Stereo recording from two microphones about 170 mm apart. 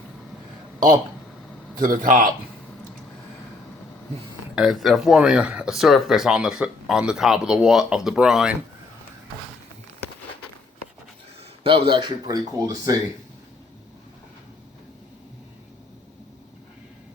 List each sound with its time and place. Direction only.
1.8 s a man's voice: 55° right (ahead or behind)
4.5 s speech: centre (ahead or behind)
11.6 s speech: 30° right (ahead or behind)